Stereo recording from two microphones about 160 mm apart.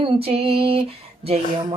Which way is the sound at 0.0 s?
40° right (ahead or behind).